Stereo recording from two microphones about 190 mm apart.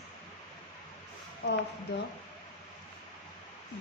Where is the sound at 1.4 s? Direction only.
65° left (ahead or behind).